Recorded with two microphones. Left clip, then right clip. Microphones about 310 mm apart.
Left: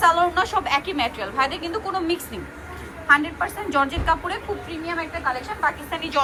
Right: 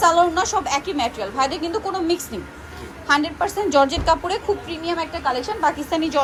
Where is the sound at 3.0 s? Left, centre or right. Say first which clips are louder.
Left 1 dB; centre.